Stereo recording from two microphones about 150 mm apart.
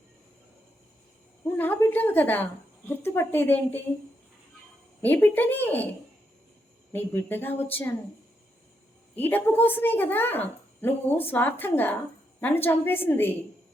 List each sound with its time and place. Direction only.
1.5 s a woman's voice: 10° left (ahead or behind)
5.0 s a woman's voice: 10° left (ahead or behind)
6.9 s a woman's voice: 15° left (ahead or behind)
9.1 s a woman's voice: 10° left (ahead or behind)